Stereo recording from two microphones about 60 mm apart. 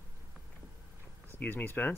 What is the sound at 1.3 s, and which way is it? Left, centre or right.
Speech, left.